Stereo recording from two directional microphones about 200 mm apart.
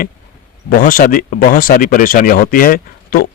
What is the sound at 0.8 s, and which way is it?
Speech, 45° left (ahead or behind).